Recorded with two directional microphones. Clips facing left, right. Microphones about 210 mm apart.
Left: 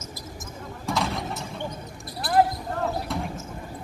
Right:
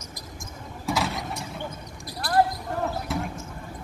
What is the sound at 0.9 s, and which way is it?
Vehicle, centre (ahead or behind).